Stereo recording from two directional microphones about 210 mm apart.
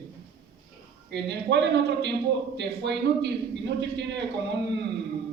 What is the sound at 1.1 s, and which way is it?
A man's voice, 55° right (ahead or behind).